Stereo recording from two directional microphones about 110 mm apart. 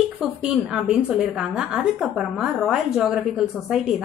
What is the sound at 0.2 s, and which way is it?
A woman's voice, 5° right (ahead or behind).